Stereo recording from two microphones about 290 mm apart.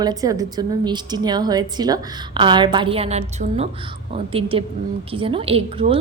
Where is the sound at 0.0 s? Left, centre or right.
Centre.